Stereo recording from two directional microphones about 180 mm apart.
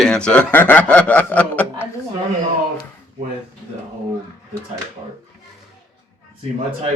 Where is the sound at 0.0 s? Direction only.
5° left (ahead or behind).